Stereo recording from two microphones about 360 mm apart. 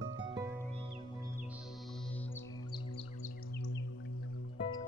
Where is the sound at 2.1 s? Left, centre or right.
Centre.